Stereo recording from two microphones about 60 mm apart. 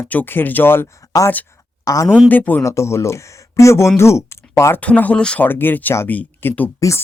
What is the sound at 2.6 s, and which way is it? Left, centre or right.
Speech, left.